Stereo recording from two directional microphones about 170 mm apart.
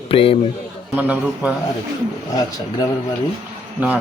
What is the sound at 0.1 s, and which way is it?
Speech, 35° left (ahead or behind).